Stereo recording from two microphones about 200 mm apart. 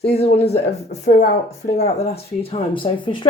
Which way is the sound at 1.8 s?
30° left (ahead or behind).